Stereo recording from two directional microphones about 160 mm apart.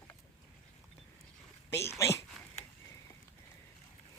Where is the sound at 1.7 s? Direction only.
15° left (ahead or behind).